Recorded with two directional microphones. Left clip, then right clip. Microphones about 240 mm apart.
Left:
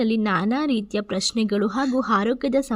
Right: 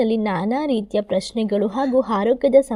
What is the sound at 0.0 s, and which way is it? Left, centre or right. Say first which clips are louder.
A woman's voice: right 2 dB; centre.